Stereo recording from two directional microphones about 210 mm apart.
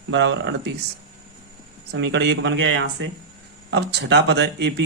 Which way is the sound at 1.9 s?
55° right (ahead or behind).